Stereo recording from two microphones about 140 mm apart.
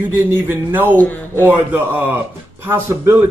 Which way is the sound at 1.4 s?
15° right (ahead or behind).